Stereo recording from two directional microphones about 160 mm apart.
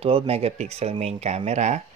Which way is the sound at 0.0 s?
40° right (ahead or behind).